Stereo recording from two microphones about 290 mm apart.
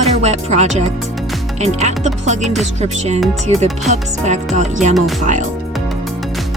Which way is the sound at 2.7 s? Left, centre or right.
Right.